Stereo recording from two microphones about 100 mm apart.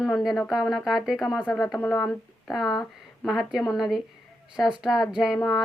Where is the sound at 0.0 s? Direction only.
Centre (ahead or behind).